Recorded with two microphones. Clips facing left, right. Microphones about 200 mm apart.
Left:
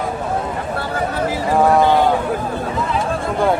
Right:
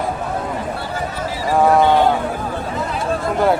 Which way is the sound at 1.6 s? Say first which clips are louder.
Right 1 dB; centre (ahead or behind).